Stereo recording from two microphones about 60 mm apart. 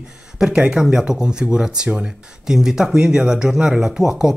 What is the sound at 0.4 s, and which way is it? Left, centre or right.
Speech, centre.